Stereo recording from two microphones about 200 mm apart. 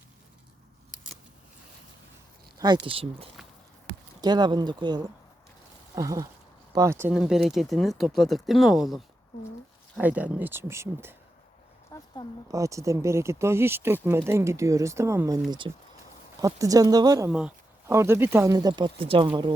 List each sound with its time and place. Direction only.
2.6 s speech: 20° right (ahead or behind)
7.1 s speech: centre (ahead or behind)
10.0 s speech: 10° right (ahead or behind)
11.9 s a sound: 15° left (ahead or behind)
12.5 s speech: 15° right (ahead or behind)